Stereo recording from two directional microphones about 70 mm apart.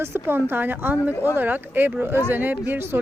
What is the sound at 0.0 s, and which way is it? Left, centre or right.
A woman's voice, right.